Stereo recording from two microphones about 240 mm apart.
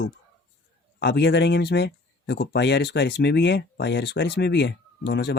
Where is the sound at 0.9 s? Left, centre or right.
Left.